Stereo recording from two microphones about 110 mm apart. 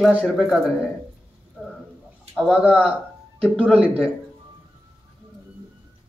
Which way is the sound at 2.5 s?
15° right (ahead or behind).